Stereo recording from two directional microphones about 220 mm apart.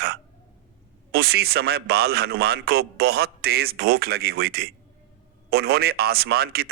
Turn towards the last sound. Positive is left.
turn(degrees=-45)  # may be behind; listen again after turning